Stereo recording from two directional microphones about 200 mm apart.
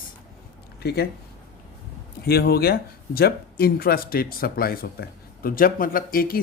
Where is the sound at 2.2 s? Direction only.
50° left (ahead or behind).